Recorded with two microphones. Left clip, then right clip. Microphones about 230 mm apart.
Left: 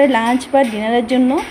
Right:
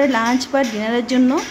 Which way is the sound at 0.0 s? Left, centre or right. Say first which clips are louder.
Left 3 dB; centre.